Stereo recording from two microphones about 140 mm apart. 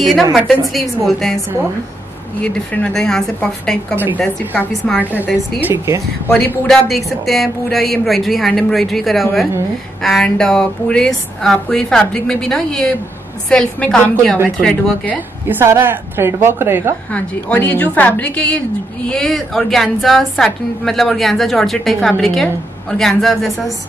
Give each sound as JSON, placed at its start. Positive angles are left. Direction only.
{"t": 0.0, "sound": "a woman's voice", "side_deg": 0}
{"t": 2.4, "sound": "a woman's voice", "side_deg": 10}
{"t": 3.9, "sound": "a woman's voice", "side_deg": -15}
{"t": 4.2, "sound": "a woman's voice", "side_deg": 10}
{"t": 5.0, "sound": "a woman's voice", "side_deg": -10}
{"t": 6.7, "sound": "a woman's voice", "side_deg": 0}
{"t": 15.4, "sound": "a woman's voice", "side_deg": -15}
{"t": 17.1, "sound": "a woman's voice", "side_deg": 10}